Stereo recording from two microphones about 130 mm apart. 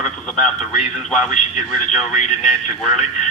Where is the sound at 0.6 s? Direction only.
60° left (ahead or behind).